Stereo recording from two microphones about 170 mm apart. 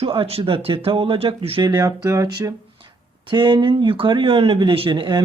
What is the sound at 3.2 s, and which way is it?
Speech, 30° right (ahead or behind).